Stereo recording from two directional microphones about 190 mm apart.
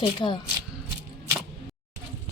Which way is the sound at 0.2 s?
20° left (ahead or behind).